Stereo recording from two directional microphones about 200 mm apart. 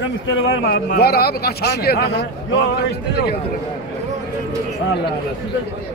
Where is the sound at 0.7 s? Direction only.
50° left (ahead or behind).